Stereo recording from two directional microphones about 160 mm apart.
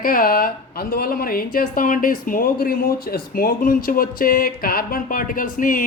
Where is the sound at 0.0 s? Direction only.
60° left (ahead or behind).